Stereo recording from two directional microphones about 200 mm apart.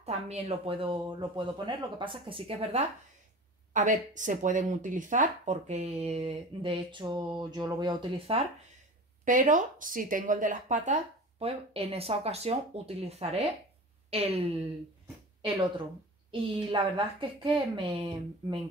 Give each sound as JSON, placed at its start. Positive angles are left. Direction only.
{"t": 0.0, "sound": "speech", "side_deg": -30}
{"t": 9.2, "sound": "speech", "side_deg": -40}
{"t": 16.3, "sound": "speech", "side_deg": -25}